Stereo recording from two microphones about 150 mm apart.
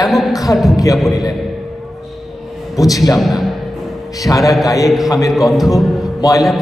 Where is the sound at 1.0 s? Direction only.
Centre (ahead or behind).